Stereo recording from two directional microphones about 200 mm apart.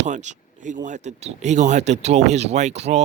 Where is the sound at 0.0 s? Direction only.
35° right (ahead or behind).